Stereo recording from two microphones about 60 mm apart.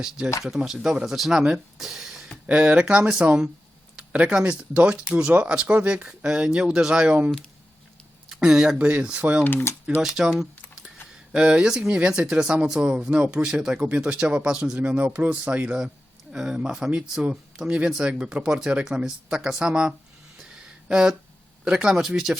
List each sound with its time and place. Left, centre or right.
0.4 s speech: centre
2.5 s speech: centre
8.3 s speech: centre
9.4 s speech: left
10.0 s speech: centre
10.4 s a sound: centre
11.9 s speech: centre
13.7 s speech: centre
16.3 s speech: centre
20.8 s a sound: centre
21.6 s speech: centre